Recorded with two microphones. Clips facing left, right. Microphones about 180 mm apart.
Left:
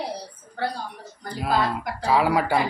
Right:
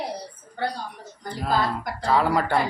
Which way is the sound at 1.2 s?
5° left (ahead or behind).